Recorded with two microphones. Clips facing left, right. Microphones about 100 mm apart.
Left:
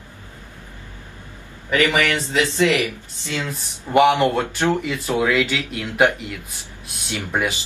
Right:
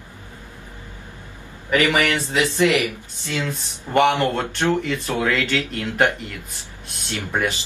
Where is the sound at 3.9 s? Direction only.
5° left (ahead or behind).